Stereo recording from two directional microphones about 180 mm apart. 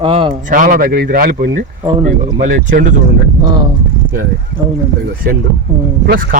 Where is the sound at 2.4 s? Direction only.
45° right (ahead or behind).